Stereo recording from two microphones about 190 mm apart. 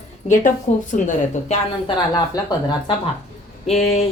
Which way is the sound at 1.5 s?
25° left (ahead or behind).